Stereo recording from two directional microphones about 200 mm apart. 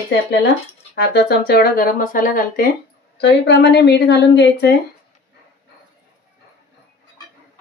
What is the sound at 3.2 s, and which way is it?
A woman's voice, 60° left (ahead or behind).